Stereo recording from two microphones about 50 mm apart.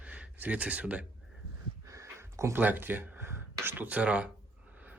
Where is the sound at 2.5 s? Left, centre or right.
Right.